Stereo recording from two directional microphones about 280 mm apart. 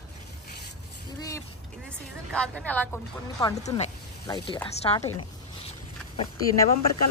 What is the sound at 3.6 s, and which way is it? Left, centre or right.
Speech, left.